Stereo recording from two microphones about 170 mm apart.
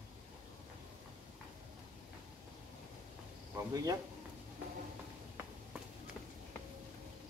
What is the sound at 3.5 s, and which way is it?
Speech, 20° right (ahead or behind).